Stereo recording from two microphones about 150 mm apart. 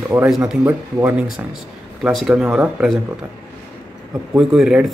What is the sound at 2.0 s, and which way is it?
Speech, centre (ahead or behind).